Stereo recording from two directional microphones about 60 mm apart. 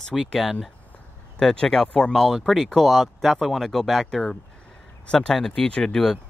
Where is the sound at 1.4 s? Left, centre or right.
Centre.